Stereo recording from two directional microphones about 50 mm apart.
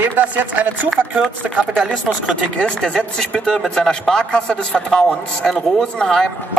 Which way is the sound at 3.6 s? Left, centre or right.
Centre.